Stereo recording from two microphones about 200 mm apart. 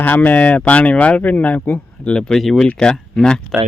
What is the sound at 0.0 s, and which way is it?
Speech, 10° left (ahead or behind).